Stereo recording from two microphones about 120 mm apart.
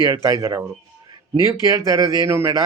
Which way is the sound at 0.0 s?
25° right (ahead or behind).